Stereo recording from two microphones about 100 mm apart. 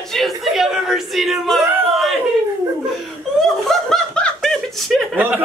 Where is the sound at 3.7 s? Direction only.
5° left (ahead or behind).